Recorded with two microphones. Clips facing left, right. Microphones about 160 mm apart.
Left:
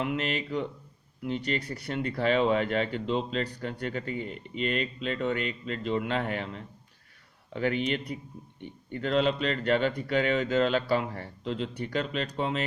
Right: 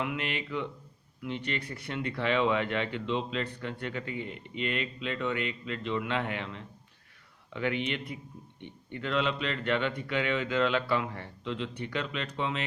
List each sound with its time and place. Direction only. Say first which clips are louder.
0.0 s speech: left 3 dB; 40° left (ahead or behind)